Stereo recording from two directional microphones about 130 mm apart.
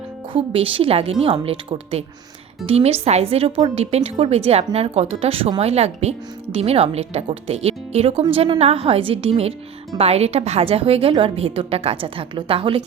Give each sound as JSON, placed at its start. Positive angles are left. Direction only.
{"t": 0.3, "sound": "a woman's voice", "side_deg": -45}